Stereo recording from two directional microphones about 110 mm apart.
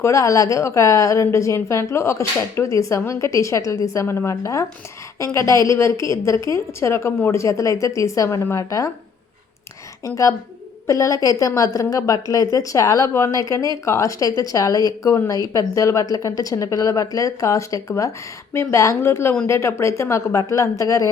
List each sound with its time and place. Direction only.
0.0 s a woman's voice: 30° left (ahead or behind)
10.0 s a woman's voice: 30° left (ahead or behind)